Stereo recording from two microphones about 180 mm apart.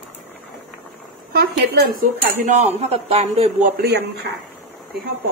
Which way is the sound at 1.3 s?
60° right (ahead or behind).